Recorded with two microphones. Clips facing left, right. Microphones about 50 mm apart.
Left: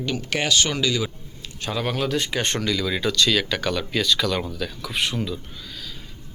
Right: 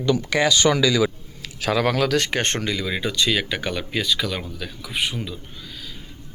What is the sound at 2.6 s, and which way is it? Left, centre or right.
Speech, right.